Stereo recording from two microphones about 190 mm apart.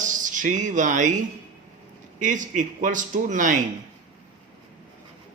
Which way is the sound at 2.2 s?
40° right (ahead or behind).